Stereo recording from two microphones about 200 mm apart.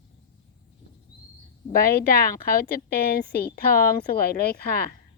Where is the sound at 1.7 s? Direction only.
45° left (ahead or behind).